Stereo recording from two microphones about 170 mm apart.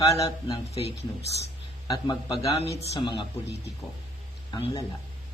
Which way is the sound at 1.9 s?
25° left (ahead or behind).